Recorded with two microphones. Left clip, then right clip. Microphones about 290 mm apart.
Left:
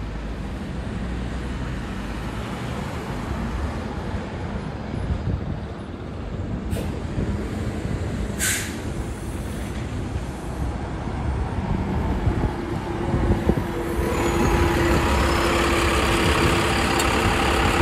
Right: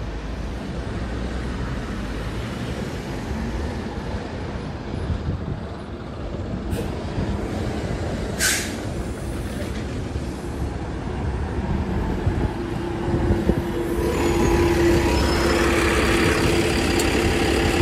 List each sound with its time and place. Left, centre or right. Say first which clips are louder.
14.0 s vehicle: right 1 dB; left